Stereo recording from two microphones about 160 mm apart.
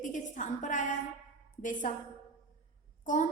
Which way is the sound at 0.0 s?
50° left (ahead or behind).